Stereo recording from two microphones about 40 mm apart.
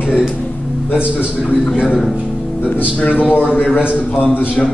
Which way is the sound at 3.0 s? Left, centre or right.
Left.